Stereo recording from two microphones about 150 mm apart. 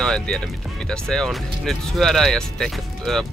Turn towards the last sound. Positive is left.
turn(degrees=5)  # may be behind; listen again after turning